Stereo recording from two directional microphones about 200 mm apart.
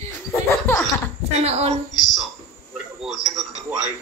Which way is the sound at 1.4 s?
30° right (ahead or behind).